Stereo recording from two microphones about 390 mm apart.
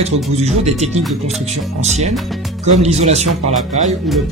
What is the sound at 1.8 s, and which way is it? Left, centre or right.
Speech, centre.